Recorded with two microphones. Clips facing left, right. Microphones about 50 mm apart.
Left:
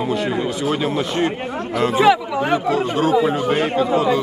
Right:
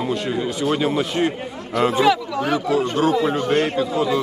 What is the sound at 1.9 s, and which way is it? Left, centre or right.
Speech, centre.